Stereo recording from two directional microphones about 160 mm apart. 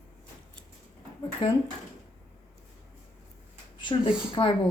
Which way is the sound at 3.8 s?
30° left (ahead or behind).